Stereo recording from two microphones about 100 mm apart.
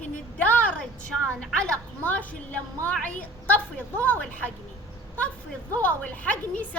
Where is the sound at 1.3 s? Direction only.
5° left (ahead or behind).